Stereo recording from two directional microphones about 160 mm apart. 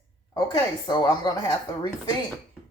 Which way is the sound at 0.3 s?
25° left (ahead or behind).